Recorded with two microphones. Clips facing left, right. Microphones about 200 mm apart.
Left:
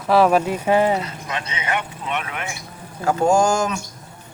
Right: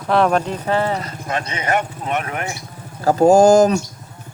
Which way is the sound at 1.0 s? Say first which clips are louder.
Right 4 dB; 45° right (ahead or behind).